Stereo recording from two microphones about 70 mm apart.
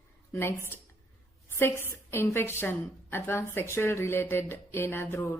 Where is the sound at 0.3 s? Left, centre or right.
Left.